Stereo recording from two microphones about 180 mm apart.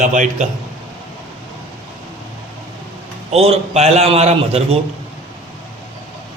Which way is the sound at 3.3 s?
35° right (ahead or behind).